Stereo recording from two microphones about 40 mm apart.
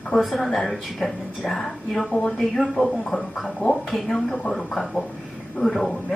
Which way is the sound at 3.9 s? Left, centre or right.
Centre.